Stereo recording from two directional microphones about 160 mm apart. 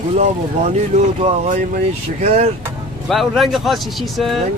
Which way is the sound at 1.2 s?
45° right (ahead or behind).